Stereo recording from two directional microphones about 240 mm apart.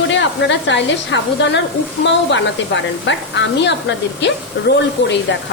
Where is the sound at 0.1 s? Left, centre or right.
Left.